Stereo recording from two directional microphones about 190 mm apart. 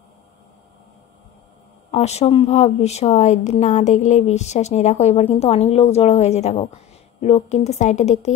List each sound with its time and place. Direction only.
1.9 s a woman's voice: 35° left (ahead or behind)